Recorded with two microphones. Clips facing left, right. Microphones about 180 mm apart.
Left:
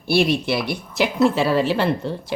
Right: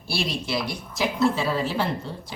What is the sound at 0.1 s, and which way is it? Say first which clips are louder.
Speech: left 9 dB; 60° left (ahead or behind).